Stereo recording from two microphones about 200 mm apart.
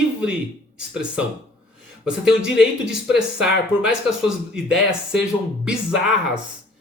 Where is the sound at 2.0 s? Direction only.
5° right (ahead or behind).